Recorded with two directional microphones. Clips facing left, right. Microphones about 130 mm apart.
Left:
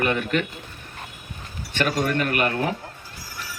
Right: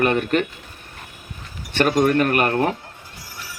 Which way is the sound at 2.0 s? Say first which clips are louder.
Right 6 dB; 45° right (ahead or behind).